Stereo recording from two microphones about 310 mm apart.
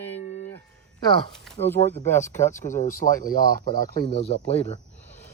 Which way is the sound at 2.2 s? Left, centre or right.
Left.